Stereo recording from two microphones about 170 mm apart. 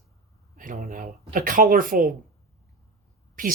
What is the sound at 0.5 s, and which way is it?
Speech, 50° right (ahead or behind).